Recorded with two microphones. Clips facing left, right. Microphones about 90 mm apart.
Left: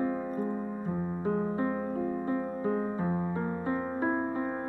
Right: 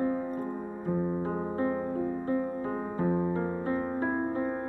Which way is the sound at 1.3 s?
Centre (ahead or behind).